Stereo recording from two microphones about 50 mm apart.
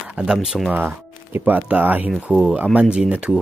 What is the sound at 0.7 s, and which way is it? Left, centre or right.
Speech, right.